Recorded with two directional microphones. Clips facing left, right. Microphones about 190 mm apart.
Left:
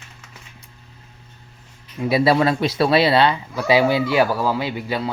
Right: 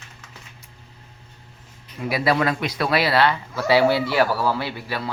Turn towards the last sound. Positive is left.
turn(degrees=15)  # may be behind; listen again after turning